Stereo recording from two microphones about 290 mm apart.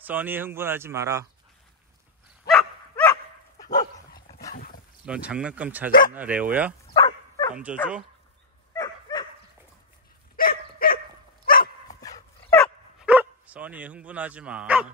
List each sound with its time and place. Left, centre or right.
0.0 s speech: centre
3.5 s dog: centre
5.0 s speech: centre
5.9 s speech: left
6.1 s speech: centre
6.9 s dog: centre
7.5 s speech: centre
8.7 s dog: centre
10.3 s dog: left
12.0 s dog: centre